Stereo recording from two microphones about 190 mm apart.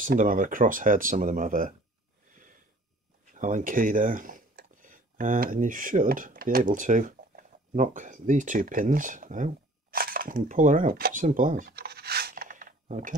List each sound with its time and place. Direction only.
0.0 s speech: 45° right (ahead or behind)
2.3 s a sound: 45° right (ahead or behind)
3.3 s speech: 45° right (ahead or behind)